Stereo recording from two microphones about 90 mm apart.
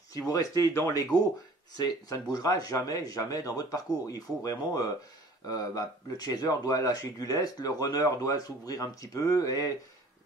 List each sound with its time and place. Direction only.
0.3 s speech: 35° left (ahead or behind)